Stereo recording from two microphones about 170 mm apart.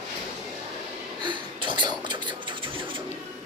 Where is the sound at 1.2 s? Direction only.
30° right (ahead or behind).